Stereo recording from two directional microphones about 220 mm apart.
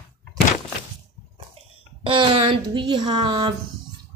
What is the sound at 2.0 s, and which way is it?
A woman's voice, 25° right (ahead or behind).